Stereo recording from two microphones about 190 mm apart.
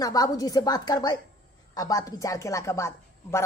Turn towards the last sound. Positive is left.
turn(degrees=15)  # may be behind; listen again after turning